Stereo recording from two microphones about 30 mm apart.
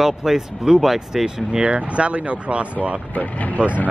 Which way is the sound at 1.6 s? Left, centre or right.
Right.